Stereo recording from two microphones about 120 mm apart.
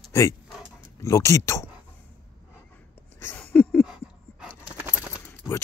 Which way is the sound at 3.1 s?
15° left (ahead or behind).